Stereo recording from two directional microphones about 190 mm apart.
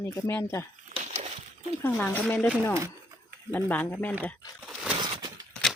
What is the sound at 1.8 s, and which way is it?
Speech, 10° left (ahead or behind).